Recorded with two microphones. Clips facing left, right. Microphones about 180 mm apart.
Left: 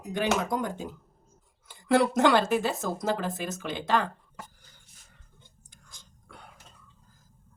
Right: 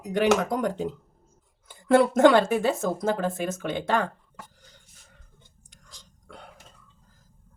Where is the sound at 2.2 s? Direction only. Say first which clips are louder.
Right 5 dB; 55° right (ahead or behind).